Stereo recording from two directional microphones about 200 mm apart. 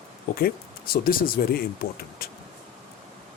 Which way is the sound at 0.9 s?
50° left (ahead or behind).